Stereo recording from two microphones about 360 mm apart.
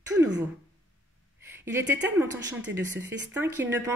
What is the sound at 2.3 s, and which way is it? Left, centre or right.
Speech, right.